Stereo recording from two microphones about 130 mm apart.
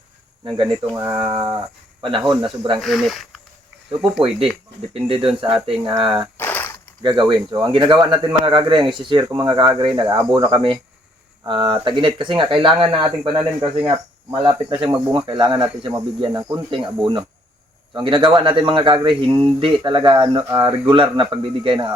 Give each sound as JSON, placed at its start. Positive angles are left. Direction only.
{"t": 0.4, "sound": "speech", "side_deg": -35}
{"t": 0.9, "sound": "speech", "side_deg": -25}
{"t": 2.8, "sound": "speech", "side_deg": 0}
{"t": 4.9, "sound": "speech", "side_deg": -45}
{"t": 6.3, "sound": "a sound", "side_deg": 15}
{"t": 7.0, "sound": "speech", "side_deg": -35}
{"t": 16.7, "sound": "speech", "side_deg": -35}